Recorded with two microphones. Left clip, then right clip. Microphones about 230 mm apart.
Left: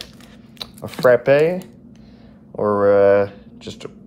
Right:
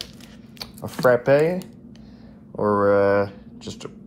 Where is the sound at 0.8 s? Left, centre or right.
Left.